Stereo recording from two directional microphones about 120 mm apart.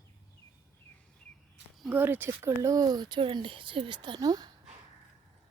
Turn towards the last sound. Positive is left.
turn(degrees=-35)  # may be behind; listen again after turning